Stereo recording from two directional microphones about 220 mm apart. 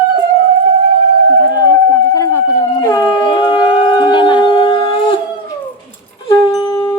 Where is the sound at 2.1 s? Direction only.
15° left (ahead or behind).